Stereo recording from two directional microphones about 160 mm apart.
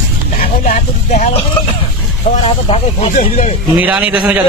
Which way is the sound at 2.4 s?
40° left (ahead or behind).